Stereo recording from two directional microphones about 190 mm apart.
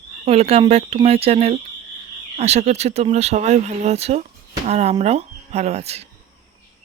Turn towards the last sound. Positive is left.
turn(degrees=-35)  # may be behind; listen again after turning